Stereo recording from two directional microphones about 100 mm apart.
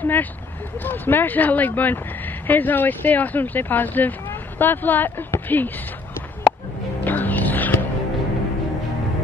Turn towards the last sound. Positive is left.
turn(degrees=15)  # may be behind; listen again after turning